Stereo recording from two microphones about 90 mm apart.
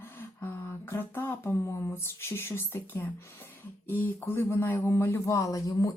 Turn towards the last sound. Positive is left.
turn(degrees=40)  # may be behind; listen again after turning